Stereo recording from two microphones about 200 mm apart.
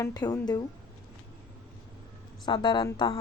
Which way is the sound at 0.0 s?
20° left (ahead or behind).